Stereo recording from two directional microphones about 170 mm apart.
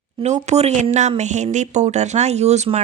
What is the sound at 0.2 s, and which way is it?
Speech, 40° right (ahead or behind).